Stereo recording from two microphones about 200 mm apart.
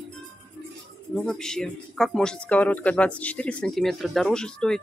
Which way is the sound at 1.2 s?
5° left (ahead or behind).